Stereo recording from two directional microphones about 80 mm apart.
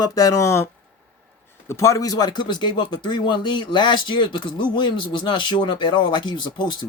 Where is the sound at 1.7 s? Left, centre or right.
Left.